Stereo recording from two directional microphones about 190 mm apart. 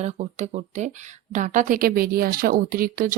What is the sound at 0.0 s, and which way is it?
Speech, 35° right (ahead or behind).